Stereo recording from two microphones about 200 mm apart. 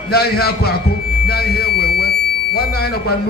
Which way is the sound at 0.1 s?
50° left (ahead or behind).